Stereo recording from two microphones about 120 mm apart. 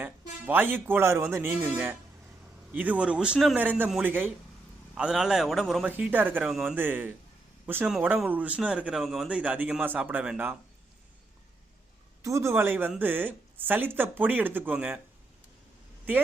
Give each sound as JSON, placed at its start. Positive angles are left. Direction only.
{"t": 0.0, "sound": "speech", "side_deg": -15}
{"t": 4.9, "sound": "a man's voice", "side_deg": -5}
{"t": 5.8, "sound": "speech", "side_deg": -10}
{"t": 6.5, "sound": "a man's voice", "side_deg": 0}
{"t": 6.7, "sound": "speech", "side_deg": -15}
{"t": 8.3, "sound": "speech", "side_deg": -10}
{"t": 12.2, "sound": "a man's voice", "side_deg": -25}